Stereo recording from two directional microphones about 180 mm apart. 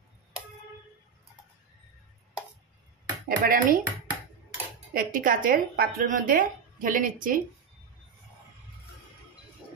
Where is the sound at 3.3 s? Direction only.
50° right (ahead or behind).